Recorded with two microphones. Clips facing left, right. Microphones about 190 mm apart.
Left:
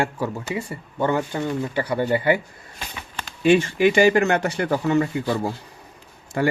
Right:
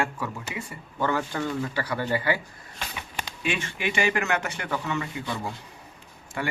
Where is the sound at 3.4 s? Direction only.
35° left (ahead or behind).